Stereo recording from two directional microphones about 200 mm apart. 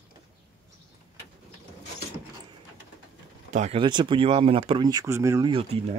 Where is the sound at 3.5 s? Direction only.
35° right (ahead or behind).